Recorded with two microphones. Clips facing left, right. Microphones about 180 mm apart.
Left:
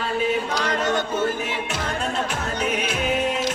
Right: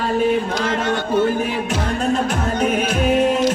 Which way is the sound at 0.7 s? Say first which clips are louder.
Left 1 dB; 40° left (ahead or behind).